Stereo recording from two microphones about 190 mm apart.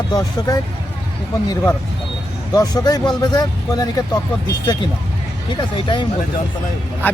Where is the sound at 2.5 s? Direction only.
20° left (ahead or behind).